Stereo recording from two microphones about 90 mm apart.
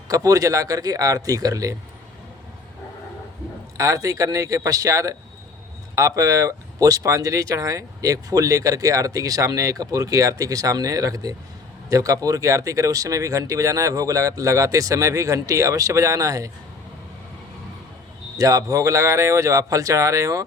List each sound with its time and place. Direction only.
0.1 s speech: 40° right (ahead or behind)
3.8 s speech: 40° right (ahead or behind)
18.3 s speech: 40° right (ahead or behind)